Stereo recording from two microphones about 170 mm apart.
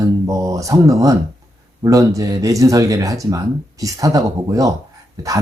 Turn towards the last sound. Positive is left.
turn(degrees=-20)  # may be behind; listen again after turning